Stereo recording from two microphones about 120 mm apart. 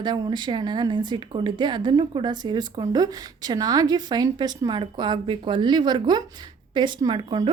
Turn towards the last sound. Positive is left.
turn(degrees=-40)  # may be behind; listen again after turning